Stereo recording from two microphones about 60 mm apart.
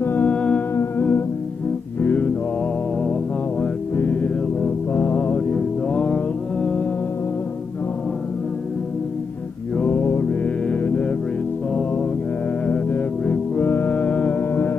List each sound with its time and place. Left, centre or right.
0.0 s music: left
0.3 s music: centre
0.9 s music: left
3.0 s music: centre
3.9 s music: left
5.9 s music: centre
9.8 s mantra: left
10.8 s music: left
14.5 s music: left